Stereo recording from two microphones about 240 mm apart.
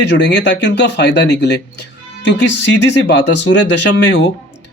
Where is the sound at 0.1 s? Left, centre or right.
Left.